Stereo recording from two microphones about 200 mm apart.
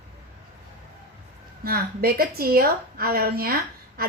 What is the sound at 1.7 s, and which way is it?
A woman's voice, 50° right (ahead or behind).